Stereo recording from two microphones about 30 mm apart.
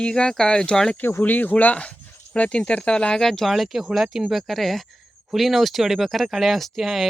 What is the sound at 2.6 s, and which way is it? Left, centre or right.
Speech, left.